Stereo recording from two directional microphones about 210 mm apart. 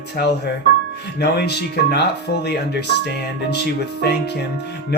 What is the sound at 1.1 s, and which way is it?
Speech, 50° left (ahead or behind).